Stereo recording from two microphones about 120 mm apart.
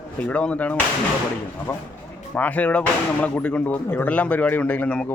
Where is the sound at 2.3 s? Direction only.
15° left (ahead or behind).